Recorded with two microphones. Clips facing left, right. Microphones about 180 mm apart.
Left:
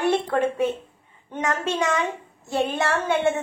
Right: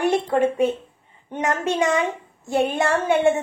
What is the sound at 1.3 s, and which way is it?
Child singing, 20° right (ahead or behind).